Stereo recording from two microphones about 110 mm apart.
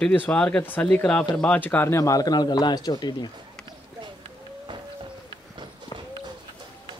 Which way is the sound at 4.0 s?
45° right (ahead or behind).